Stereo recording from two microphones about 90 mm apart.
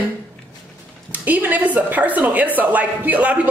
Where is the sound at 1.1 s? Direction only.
20° right (ahead or behind).